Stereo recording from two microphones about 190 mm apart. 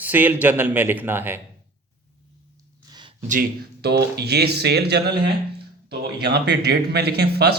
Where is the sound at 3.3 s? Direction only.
55° right (ahead or behind).